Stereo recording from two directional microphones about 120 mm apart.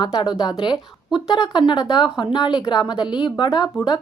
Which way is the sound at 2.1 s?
40° left (ahead or behind).